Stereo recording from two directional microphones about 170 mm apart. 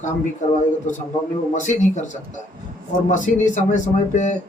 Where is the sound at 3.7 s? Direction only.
45° left (ahead or behind).